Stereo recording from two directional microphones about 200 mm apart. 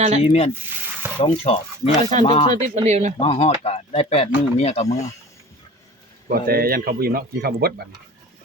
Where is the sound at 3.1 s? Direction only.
30° left (ahead or behind).